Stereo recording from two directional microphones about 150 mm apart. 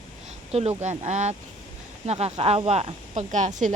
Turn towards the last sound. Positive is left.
turn(degrees=-55)  # may be behind; listen again after turning